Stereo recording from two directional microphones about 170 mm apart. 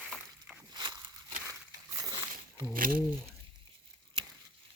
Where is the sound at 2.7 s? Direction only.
55° right (ahead or behind).